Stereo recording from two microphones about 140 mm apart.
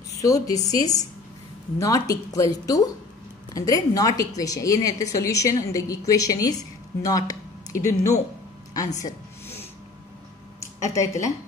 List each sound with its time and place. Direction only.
0.1 s a woman's voice: 25° left (ahead or behind)
10.6 s speech: 20° left (ahead or behind)